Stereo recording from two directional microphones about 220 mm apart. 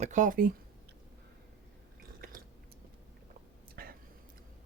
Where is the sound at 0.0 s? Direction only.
35° right (ahead or behind).